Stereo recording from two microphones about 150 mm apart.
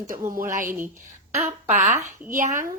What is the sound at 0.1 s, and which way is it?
Speech, 65° right (ahead or behind).